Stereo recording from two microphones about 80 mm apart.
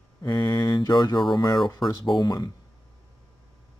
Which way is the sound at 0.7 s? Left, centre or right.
Left.